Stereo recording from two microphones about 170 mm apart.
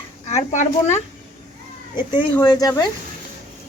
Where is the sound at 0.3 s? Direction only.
45° left (ahead or behind).